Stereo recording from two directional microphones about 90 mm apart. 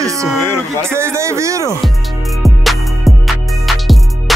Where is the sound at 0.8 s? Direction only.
30° right (ahead or behind).